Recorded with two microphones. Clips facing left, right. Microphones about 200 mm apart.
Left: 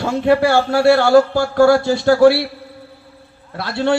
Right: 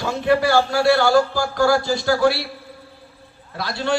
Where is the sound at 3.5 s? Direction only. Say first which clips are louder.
Left 5 dB; 60° left (ahead or behind).